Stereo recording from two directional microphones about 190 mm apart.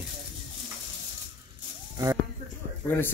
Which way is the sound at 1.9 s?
20° right (ahead or behind).